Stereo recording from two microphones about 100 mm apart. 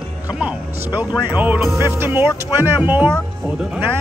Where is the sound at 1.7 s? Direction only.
25° right (ahead or behind).